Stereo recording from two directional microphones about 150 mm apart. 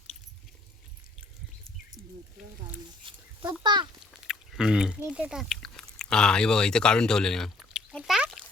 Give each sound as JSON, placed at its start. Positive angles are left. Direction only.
{"t": 3.1, "sound": "a sound", "side_deg": -35}
{"t": 3.4, "sound": "a child's voice", "side_deg": -30}
{"t": 4.3, "sound": "chewing", "side_deg": -5}